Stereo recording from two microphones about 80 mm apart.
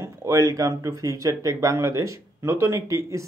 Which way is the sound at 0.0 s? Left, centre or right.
Right.